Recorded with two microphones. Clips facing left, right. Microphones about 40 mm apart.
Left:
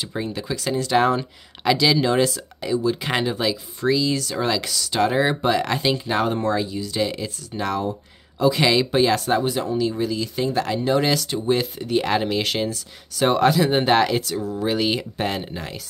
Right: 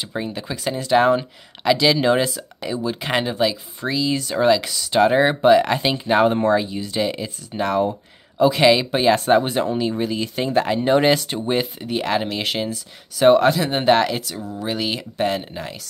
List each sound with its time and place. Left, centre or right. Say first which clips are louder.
0.0 s speech: right 1 dB; centre
4.1 s speech: right 5 dB; right
9.1 s speech: right 4 dB; right; by 15.8 s centre